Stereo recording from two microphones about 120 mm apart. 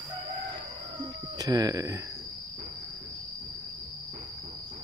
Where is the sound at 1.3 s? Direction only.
35° right (ahead or behind).